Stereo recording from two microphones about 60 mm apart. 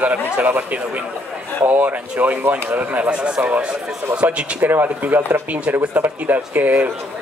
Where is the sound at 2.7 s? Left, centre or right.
Right.